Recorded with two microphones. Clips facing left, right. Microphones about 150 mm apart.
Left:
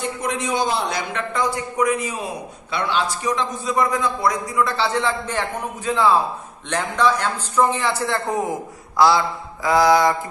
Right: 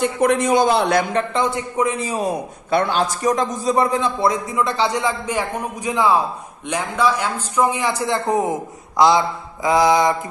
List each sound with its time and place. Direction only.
0.2 s a man's voice: 55° right (ahead or behind)
1.3 s a man's voice: 25° right (ahead or behind)